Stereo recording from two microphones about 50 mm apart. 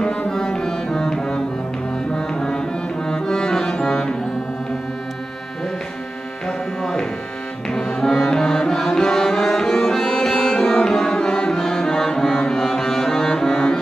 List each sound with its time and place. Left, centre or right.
0.3 s music: centre
6.4 s tabla: centre
7.7 s music: centre